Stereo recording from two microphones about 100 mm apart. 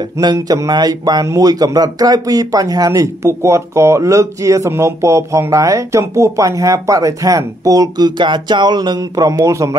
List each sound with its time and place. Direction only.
0.2 s a man's voice: 45° right (ahead or behind)
8.2 s speech: 50° right (ahead or behind); by 9.8 s 30° right (ahead or behind)